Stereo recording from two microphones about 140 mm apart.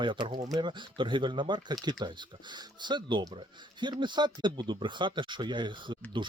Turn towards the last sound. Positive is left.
turn(degrees=-35)  # may be behind; listen again after turning